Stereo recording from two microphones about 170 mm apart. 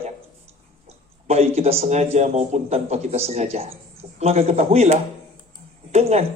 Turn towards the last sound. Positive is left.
turn(degrees=-40)  # may be behind; listen again after turning